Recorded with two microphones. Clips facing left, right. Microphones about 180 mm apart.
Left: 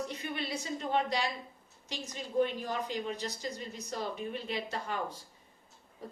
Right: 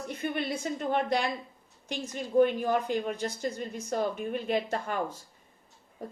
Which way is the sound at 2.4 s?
55° right (ahead or behind).